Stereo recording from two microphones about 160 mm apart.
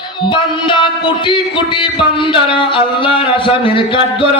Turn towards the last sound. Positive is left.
turn(degrees=35)  # may be behind; listen again after turning